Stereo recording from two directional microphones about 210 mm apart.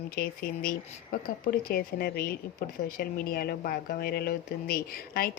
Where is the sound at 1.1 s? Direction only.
45° left (ahead or behind).